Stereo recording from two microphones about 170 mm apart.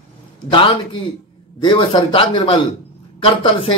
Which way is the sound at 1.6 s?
30° left (ahead or behind).